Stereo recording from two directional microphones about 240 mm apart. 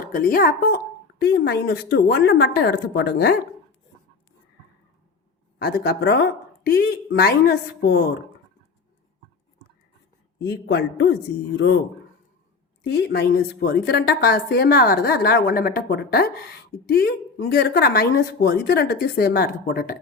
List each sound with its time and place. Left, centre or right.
0.0 s a woman's voice: left
5.6 s a woman's voice: left
10.3 s a man's voice: left
12.8 s a woman's voice: left